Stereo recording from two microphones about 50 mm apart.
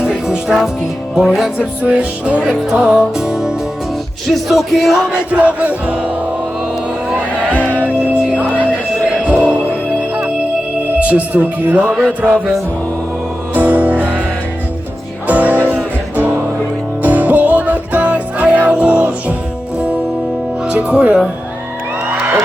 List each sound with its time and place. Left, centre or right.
0.0 s music: centre
1.8 s music: right
2.5 s music: centre
5.1 s music: right
7.5 s music: left
7.8 s music: right
10.8 s speech: right
13.5 s music: right
15.3 s music: right
17.0 s music: right
20.7 s speech: right
22.1 s music: right